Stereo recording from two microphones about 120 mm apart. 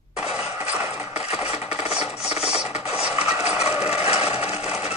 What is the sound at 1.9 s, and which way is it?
Rub, 60° left (ahead or behind).